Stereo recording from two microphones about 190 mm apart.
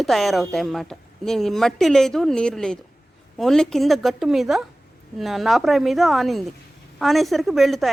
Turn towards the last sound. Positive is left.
turn(degrees=0)  # may be behind; listen again after turning